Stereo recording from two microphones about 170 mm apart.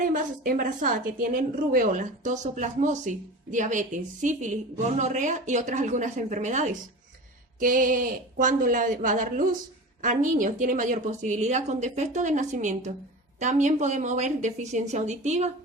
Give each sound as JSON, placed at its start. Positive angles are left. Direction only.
{"t": 0.0, "sound": "a woman's voice", "side_deg": -50}